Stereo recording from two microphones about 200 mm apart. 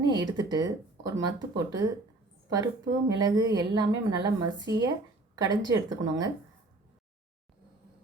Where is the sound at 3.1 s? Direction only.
20° right (ahead or behind).